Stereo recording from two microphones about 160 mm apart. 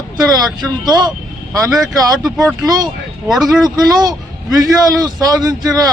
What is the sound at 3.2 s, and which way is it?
Speech, centre (ahead or behind).